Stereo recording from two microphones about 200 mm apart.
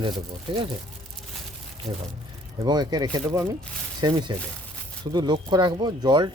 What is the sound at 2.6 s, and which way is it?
Speech, 20° right (ahead or behind).